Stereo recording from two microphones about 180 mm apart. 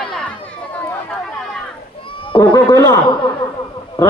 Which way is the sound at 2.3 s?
20° left (ahead or behind).